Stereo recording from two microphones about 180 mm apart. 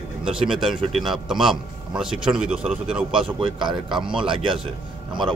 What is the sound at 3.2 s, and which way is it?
Speech, 30° right (ahead or behind).